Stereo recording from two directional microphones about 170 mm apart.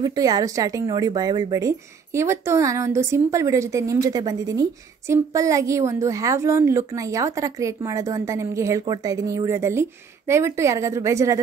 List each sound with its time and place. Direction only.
0.0 s speech: 20° right (ahead or behind)